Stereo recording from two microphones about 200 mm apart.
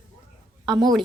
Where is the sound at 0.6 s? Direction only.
20° right (ahead or behind).